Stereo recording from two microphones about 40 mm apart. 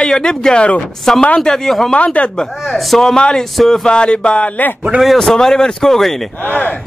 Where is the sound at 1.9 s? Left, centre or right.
Left.